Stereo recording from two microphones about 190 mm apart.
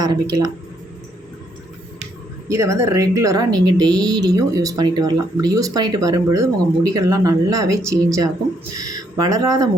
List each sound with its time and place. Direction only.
0.0 s a woman's voice: 20° right (ahead or behind)
2.5 s a woman's voice: 15° right (ahead or behind)